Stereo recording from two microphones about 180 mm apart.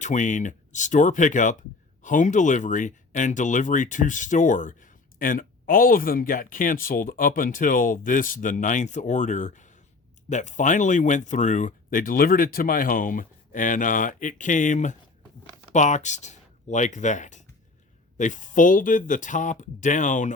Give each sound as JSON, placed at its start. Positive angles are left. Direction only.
{"t": 0.0, "sound": "speech", "side_deg": 45}